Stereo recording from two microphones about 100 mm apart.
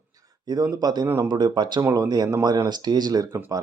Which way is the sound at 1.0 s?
30° right (ahead or behind).